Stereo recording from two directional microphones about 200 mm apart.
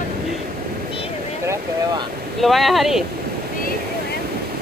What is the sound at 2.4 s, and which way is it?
Speech, centre (ahead or behind).